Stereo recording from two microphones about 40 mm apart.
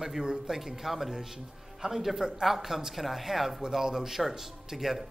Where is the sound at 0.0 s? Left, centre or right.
Centre.